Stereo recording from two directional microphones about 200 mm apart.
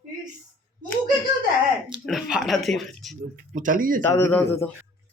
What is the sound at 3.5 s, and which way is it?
Speech, 40° right (ahead or behind).